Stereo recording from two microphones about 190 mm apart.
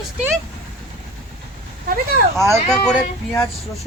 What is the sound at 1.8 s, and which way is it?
Speech, 50° right (ahead or behind).